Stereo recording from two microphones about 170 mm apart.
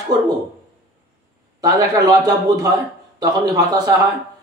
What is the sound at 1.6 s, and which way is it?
A man's voice, 20° right (ahead or behind).